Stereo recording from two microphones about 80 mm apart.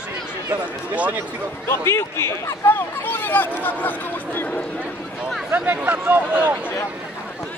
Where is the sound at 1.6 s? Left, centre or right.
Left.